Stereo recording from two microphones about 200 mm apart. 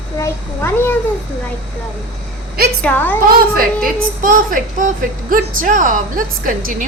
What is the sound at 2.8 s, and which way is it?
Speech, 10° left (ahead or behind).